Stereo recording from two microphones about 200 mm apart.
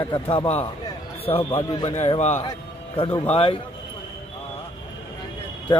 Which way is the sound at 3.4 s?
25° left (ahead or behind).